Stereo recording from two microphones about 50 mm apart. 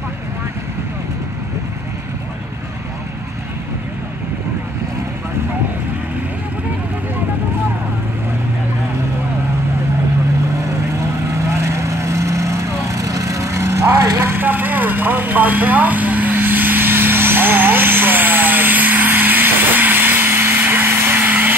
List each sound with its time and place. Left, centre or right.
10.6 s vehicle: right
14.3 s vehicle: right